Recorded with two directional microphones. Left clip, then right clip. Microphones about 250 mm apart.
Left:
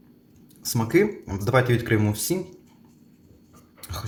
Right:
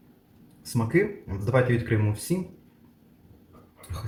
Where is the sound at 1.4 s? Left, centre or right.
Left.